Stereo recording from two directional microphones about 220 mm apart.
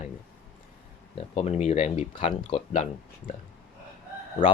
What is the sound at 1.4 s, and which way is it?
Speech, 30° left (ahead or behind).